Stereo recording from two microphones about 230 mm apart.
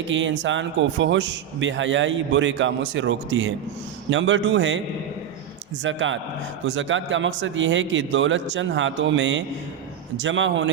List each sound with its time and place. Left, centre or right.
0.1 s a man's voice: right
5.8 s a man's voice: right